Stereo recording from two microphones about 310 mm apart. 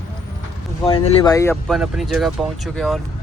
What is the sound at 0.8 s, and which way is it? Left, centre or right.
Speech, centre.